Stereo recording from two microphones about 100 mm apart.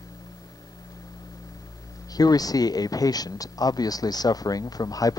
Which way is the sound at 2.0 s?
40° left (ahead or behind).